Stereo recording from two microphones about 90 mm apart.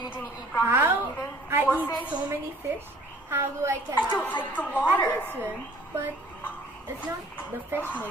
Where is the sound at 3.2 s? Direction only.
30° right (ahead or behind).